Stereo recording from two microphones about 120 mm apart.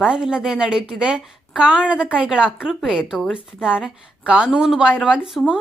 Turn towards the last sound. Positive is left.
turn(degrees=-5)  # may be behind; listen again after turning